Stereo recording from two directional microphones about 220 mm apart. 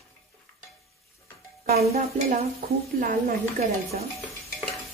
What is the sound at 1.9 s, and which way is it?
Stir, 35° right (ahead or behind).